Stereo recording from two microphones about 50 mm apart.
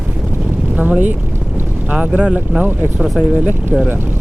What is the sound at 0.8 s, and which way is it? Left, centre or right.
Speech, right.